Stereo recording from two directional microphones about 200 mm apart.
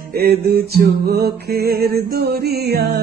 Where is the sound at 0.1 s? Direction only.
50° right (ahead or behind).